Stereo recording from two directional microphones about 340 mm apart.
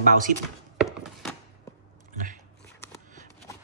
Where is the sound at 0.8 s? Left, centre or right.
Centre.